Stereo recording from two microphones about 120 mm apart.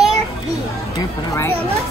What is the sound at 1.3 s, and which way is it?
Speech, 25° left (ahead or behind).